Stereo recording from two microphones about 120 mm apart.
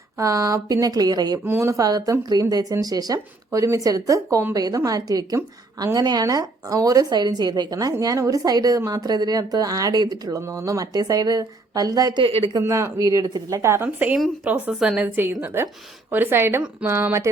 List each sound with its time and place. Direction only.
0.2 s speech: 25° right (ahead or behind)
1.5 s speech: 20° right (ahead or behind)
12.2 s speech: 50° right (ahead or behind)
12.5 s a woman's voice: 25° right (ahead or behind)